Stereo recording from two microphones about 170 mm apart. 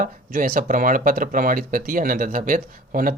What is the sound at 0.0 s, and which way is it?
Speech, 55° right (ahead or behind).